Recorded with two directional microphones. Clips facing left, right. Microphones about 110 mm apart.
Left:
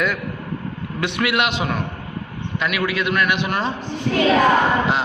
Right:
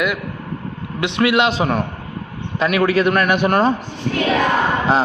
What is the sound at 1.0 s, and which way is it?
Speech, 25° right (ahead or behind).